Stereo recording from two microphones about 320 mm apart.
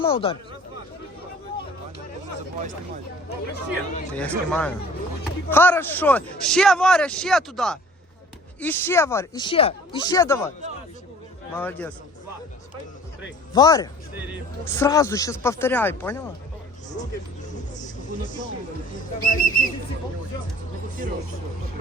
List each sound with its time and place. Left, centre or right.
0.0 s speech: centre
4.1 s a man's voice: centre
11.5 s a man's voice: centre
13.5 s speech: centre
18.9 s speech: left